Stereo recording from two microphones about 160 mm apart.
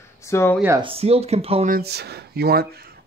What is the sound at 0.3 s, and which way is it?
Speech, 15° left (ahead or behind).